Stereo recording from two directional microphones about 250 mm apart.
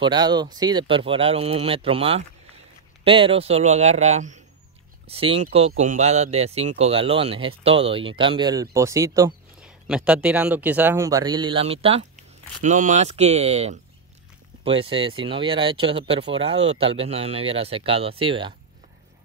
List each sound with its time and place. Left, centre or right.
0.0 s speech: centre